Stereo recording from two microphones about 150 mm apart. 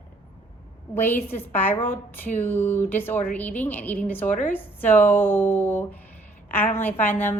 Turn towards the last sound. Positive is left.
turn(degrees=15)  # may be behind; listen again after turning